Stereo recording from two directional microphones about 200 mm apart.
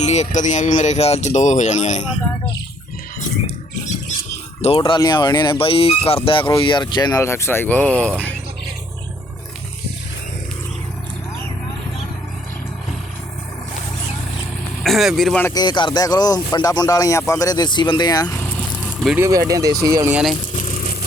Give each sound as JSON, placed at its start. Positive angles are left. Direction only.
{"t": 0.0, "sound": "speech", "side_deg": 35}
{"t": 4.6, "sound": "speech", "side_deg": 30}
{"t": 14.8, "sound": "speech", "side_deg": 0}
{"t": 15.5, "sound": "speech", "side_deg": 20}
{"t": 19.0, "sound": "speech", "side_deg": -10}
{"t": 20.6, "sound": "a sound", "side_deg": 45}